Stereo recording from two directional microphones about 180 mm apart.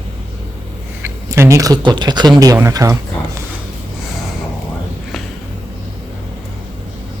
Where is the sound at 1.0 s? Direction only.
15° right (ahead or behind).